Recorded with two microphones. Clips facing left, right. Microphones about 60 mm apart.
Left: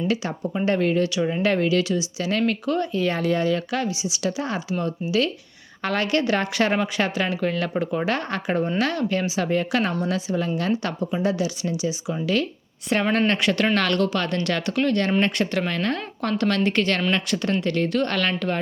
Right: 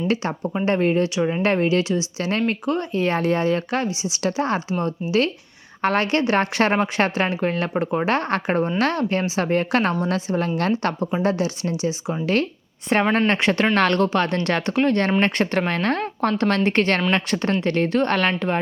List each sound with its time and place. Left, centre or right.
0.1 s a woman's voice: right
13.1 s a woman's voice: right